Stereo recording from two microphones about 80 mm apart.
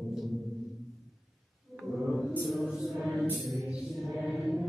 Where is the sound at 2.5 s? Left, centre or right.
Centre.